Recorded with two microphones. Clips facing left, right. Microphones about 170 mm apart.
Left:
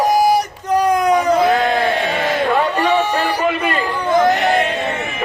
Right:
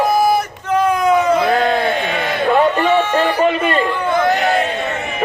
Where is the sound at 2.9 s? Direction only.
10° left (ahead or behind).